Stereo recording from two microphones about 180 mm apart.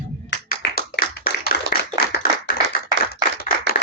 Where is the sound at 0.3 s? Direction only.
65° left (ahead or behind).